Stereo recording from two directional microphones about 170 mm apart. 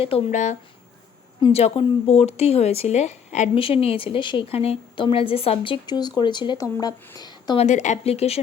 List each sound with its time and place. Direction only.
0.3 s speech: 45° left (ahead or behind)
1.4 s speech: 30° left (ahead or behind)
7.6 s speech: 45° left (ahead or behind)